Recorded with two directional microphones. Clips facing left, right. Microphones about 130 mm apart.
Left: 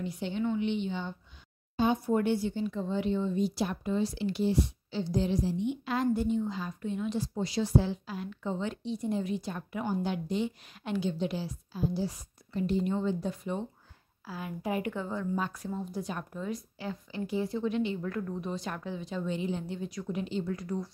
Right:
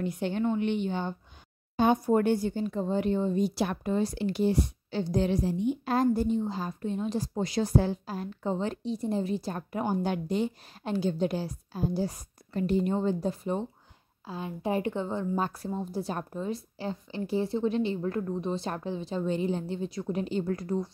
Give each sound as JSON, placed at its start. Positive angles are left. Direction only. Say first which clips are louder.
{"t": 0.0, "sound": "a woman's voice", "louder": "right 3 dB", "side_deg": -55}
{"t": 5.7, "sound": "a woman's voice", "louder": "right 6 dB", "side_deg": -40}
{"t": 10.8, "sound": "a woman's voice", "louder": "right 3 dB", "side_deg": -40}